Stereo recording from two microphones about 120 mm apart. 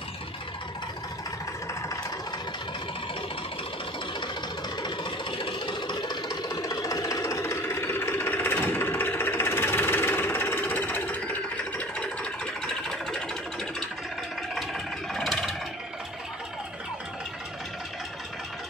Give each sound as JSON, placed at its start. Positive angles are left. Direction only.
{"t": 5.4, "sound": "engine", "side_deg": 40}
{"t": 14.5, "sound": "vehicle", "side_deg": 0}